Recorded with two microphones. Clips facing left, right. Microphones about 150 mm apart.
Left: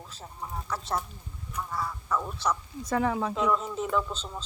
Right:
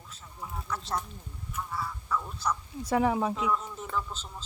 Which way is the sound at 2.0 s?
75° left (ahead or behind).